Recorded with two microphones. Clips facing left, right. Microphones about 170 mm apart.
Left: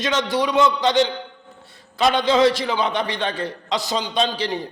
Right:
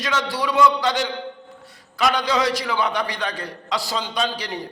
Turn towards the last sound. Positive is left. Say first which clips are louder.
# left 3 dB
turn(degrees=25)  # may be behind; listen again after turning